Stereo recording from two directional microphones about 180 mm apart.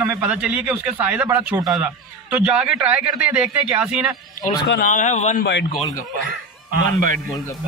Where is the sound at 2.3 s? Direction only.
5° right (ahead or behind).